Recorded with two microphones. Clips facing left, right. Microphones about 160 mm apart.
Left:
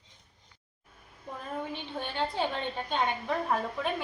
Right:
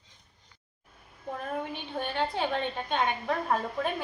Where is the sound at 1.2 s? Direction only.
60° right (ahead or behind).